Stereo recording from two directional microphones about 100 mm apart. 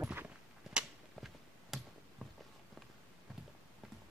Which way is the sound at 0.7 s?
Centre (ahead or behind).